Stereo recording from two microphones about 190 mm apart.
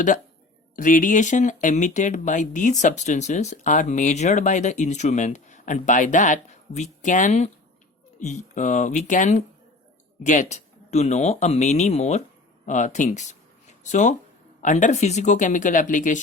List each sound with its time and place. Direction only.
0.8 s speech: 45° left (ahead or behind)